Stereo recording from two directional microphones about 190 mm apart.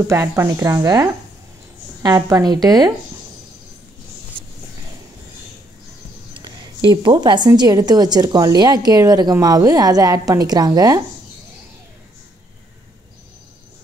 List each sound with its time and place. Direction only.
0.1 s a woman's voice: 15° right (ahead or behind)
6.4 s a woman's voice: 25° right (ahead or behind)